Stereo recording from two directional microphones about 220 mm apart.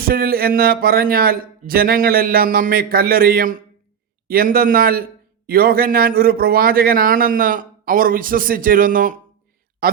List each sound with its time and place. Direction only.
0.0 s a man's voice: 45° right (ahead or behind)